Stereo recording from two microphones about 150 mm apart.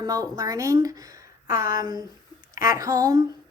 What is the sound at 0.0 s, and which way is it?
Speech, 25° right (ahead or behind).